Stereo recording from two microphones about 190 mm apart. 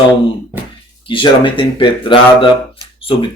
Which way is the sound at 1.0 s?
25° left (ahead or behind).